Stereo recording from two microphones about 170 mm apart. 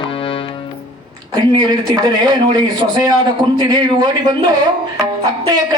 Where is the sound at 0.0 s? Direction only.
30° left (ahead or behind).